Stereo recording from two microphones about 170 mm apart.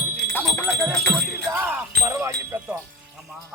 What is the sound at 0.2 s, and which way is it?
Wind chime, 10° left (ahead or behind).